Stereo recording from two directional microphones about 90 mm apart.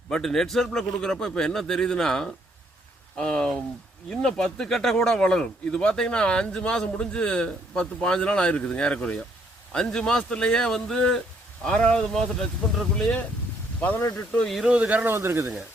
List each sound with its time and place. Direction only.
0.1 s a man's voice: 5° left (ahead or behind)
14.3 s a man's voice: 5° left (ahead or behind)
14.6 s speech: 15° right (ahead or behind)
15.1 s speech: 25° right (ahead or behind)